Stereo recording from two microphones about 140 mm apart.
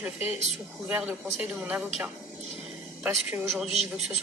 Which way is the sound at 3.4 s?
Centre (ahead or behind).